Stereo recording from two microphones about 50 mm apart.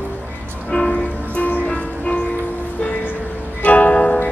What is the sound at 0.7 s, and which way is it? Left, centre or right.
Music, left.